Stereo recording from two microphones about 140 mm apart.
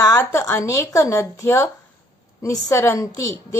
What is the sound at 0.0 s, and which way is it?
A woman's voice, 20° left (ahead or behind).